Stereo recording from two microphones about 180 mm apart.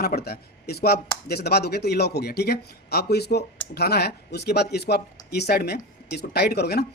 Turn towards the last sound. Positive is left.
turn(degrees=60)  # may be behind; listen again after turning